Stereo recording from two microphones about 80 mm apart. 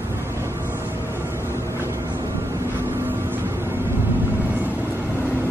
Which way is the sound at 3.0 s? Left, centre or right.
Right.